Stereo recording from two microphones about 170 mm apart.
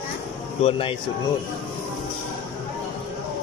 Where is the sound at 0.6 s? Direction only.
35° left (ahead or behind).